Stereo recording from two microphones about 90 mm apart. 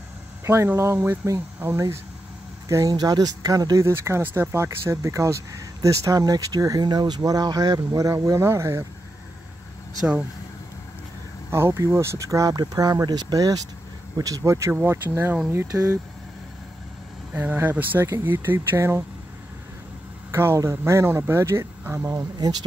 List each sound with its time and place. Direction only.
0.5 s speech: 30° right (ahead or behind)
2.7 s speech: 45° right (ahead or behind)
11.5 s speech: 30° right (ahead or behind)
14.7 s speech: 20° right (ahead or behind)
15.7 s speech: 10° right (ahead or behind)
17.3 s speech: 20° right (ahead or behind)
20.2 s speech: 30° right (ahead or behind)
22.4 s speech: 50° right (ahead or behind)